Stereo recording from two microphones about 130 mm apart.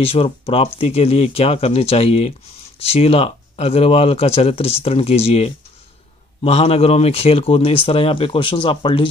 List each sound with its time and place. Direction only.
0.0 s speech: 50° left (ahead or behind)